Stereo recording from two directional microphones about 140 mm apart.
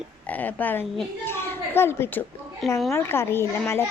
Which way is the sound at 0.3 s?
10° left (ahead or behind).